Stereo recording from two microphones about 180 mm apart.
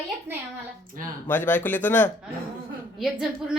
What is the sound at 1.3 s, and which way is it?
Speech, 10° left (ahead or behind).